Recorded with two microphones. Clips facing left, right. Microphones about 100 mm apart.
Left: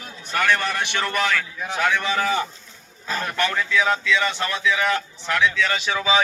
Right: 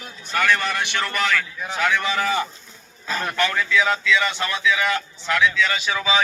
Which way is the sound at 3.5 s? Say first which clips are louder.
Left 1 dB; 35° left (ahead or behind).